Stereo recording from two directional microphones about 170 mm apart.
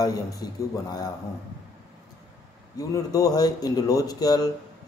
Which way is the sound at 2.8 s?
20° left (ahead or behind).